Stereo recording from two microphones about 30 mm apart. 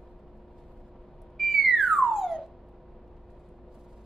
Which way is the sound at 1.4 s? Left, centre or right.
Centre.